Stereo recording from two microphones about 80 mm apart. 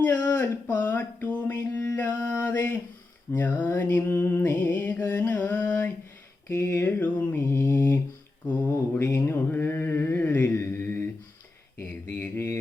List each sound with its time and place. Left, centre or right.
0.0 s music: left
9.1 s mantra: left